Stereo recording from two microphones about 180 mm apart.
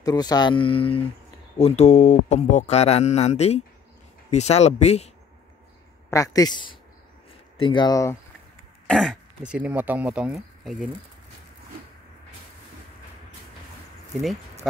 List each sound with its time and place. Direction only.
0.0 s speech: 20° left (ahead or behind); by 5.1 s 35° left (ahead or behind)
6.0 s speech: 20° left (ahead or behind)
8.8 s speech: 5° left (ahead or behind)